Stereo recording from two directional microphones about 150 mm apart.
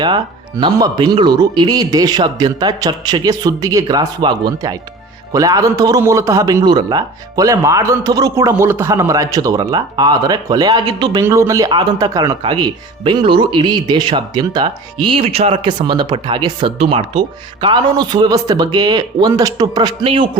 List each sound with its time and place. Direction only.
0.6 s a man's voice: 30° right (ahead or behind)
11.2 s a man's voice: 20° right (ahead or behind); by 15.7 s 40° right (ahead or behind)
15.8 s a man's voice: 30° right (ahead or behind)